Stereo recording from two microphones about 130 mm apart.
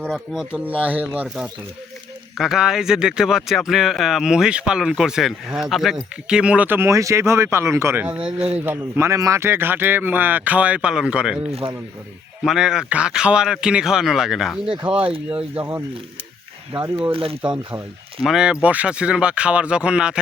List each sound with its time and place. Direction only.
0.1 s speech: 5° left (ahead or behind)
0.6 s speech: 10° right (ahead or behind)
8.2 s speech: 50° right (ahead or behind)
8.5 s speech: 15° right (ahead or behind)
12.4 s speech: 5° right (ahead or behind)
14.9 s speech: 45° right (ahead or behind)
17.1 s speech: 45° right (ahead or behind)
18.2 s speech: 5° right (ahead or behind)